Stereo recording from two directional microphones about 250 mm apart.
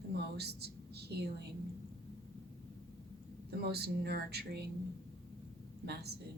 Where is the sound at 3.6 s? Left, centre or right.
Right.